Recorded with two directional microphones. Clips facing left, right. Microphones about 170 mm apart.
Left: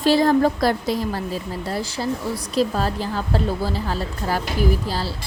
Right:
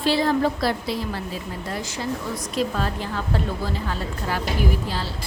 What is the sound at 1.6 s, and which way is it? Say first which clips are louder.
A woman's voice: left 3 dB; 35° left (ahead or behind).